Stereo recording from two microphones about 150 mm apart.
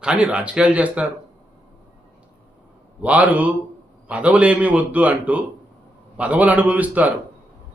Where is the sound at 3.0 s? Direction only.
10° right (ahead or behind).